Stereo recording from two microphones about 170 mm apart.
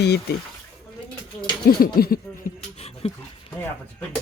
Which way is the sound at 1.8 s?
60° left (ahead or behind).